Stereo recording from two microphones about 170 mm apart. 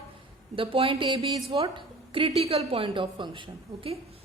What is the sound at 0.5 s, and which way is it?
A woman's voice, 30° right (ahead or behind).